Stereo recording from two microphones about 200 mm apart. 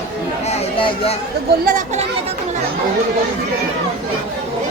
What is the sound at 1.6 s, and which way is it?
Speech, 35° right (ahead or behind).